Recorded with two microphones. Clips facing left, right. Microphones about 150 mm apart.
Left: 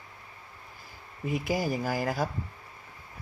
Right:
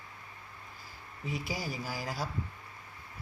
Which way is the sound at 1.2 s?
50° left (ahead or behind).